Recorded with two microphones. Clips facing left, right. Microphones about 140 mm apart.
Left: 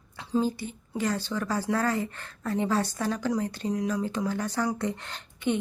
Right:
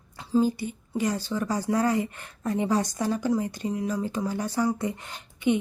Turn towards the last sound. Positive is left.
turn(degrees=-10)  # may be behind; listen again after turning